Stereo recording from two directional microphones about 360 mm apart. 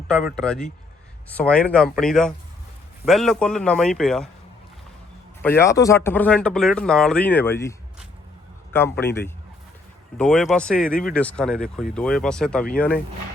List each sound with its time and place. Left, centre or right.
0.1 s speech: centre
5.4 s a man's voice: centre
10.2 s speech: centre